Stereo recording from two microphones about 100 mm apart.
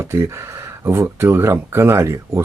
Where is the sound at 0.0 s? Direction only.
25° right (ahead or behind).